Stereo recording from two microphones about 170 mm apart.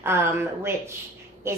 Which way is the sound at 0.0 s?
15° right (ahead or behind).